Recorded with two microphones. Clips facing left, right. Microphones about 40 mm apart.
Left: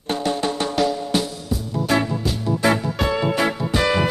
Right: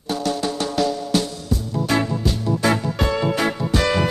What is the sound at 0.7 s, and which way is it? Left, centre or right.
Music, centre.